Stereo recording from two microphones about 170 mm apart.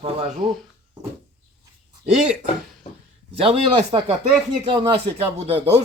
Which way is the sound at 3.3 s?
35° right (ahead or behind).